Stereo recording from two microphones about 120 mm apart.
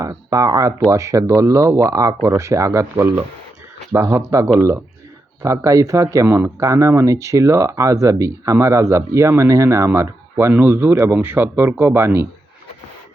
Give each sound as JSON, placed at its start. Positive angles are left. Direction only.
{"t": 0.0, "sound": "speech", "side_deg": -30}